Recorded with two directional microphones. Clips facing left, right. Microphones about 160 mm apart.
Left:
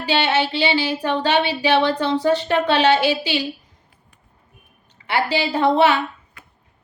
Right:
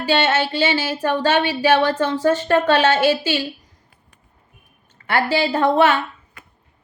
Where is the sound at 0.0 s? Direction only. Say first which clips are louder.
Right 1 dB; 45° right (ahead or behind).